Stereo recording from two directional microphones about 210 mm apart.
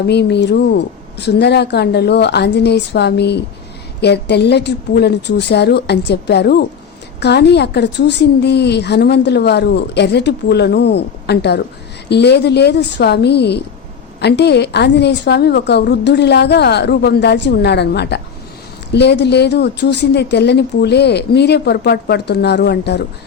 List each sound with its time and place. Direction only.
0.1 s a woman's voice: 55° left (ahead or behind)